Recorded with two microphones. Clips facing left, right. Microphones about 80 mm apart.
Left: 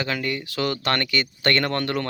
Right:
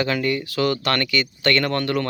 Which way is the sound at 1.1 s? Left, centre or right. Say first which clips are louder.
Right 2 dB; left.